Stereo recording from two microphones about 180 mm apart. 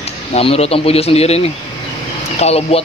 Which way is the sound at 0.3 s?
35° left (ahead or behind).